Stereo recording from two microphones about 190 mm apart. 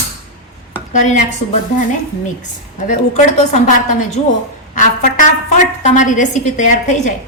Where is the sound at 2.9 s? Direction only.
40° left (ahead or behind).